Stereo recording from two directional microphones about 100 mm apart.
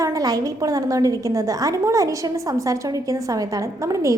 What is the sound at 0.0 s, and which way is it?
A woman's voice, 35° right (ahead or behind).